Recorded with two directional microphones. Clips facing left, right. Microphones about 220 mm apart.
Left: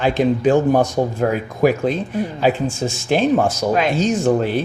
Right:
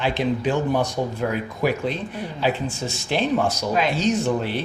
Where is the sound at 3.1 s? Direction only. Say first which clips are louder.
Left 5 dB; 45° left (ahead or behind).